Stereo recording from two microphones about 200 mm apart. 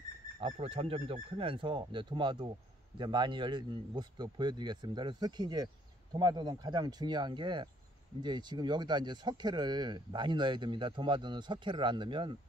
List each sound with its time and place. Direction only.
0.4 s speech: 30° right (ahead or behind)